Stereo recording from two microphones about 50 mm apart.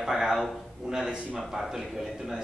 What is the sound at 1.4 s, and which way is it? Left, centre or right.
Speech, centre.